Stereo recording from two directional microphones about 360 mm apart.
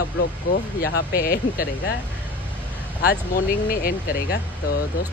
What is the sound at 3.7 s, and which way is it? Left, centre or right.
Speech, left.